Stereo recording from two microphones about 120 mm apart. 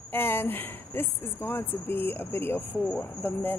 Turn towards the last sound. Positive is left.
turn(degrees=15)  # may be behind; listen again after turning